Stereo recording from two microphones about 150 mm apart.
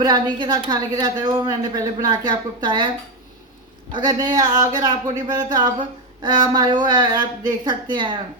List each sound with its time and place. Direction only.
0.0 s a woman's voice: 30° right (ahead or behind)
3.9 s a woman's voice: 25° right (ahead or behind)